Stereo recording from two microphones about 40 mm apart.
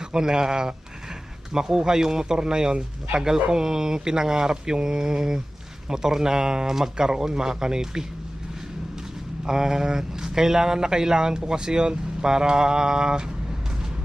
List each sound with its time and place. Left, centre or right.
0.1 s speech: centre
9.5 s speech: centre